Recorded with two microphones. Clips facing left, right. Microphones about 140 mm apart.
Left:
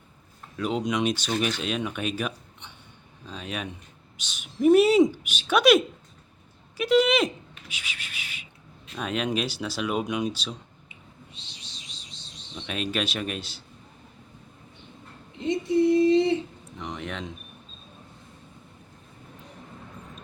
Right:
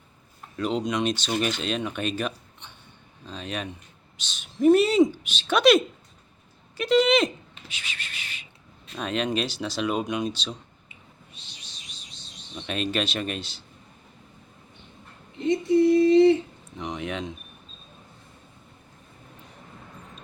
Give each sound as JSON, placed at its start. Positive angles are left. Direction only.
{"t": 0.5, "sound": "speech", "side_deg": 5}
{"t": 7.7, "sound": "a sound", "side_deg": 10}
{"t": 9.0, "sound": "speech", "side_deg": 5}
{"t": 10.8, "sound": "a sound", "side_deg": 25}
{"t": 12.5, "sound": "speech", "side_deg": 5}
{"t": 15.4, "sound": "female singing", "side_deg": 20}
{"t": 16.7, "sound": "speech", "side_deg": -5}